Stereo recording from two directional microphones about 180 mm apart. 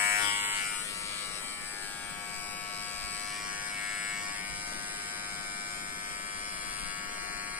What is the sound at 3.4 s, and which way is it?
Electric shaver, 5° right (ahead or behind).